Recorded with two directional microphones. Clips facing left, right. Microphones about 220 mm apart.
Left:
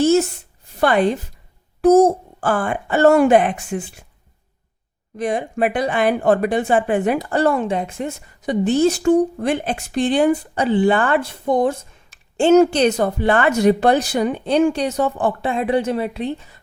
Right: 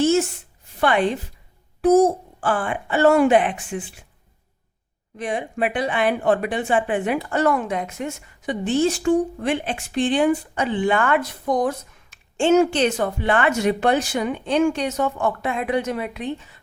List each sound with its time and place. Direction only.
0.0 s a sound: 40° left (ahead or behind)
0.8 s speech: 40° left (ahead or behind)
5.1 s speech: 40° left (ahead or behind)